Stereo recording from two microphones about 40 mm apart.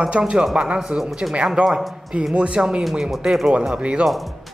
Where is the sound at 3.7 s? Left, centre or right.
Right.